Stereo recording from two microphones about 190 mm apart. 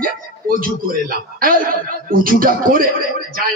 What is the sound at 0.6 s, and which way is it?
Speech, 50° right (ahead or behind).